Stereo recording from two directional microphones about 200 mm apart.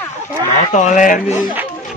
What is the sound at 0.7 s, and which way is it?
Speech, 35° left (ahead or behind).